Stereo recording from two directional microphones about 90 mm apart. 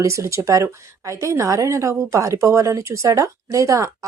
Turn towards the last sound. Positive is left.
turn(degrees=-35)  # may be behind; listen again after turning